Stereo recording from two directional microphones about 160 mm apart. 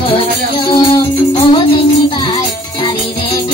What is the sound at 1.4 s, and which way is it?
Music, 35° left (ahead or behind).